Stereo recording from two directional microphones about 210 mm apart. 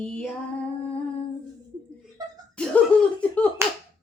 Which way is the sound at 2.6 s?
5° left (ahead or behind).